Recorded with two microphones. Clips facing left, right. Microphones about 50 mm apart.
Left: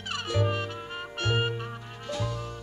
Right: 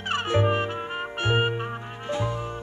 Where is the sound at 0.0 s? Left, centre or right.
Right.